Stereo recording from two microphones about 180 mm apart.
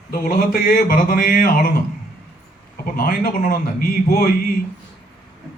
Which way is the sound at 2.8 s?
55° left (ahead or behind).